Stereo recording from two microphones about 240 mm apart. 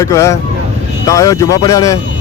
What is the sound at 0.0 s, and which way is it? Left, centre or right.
Speech, centre.